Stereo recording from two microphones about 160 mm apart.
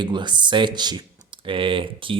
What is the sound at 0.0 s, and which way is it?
Speech, 30° right (ahead or behind).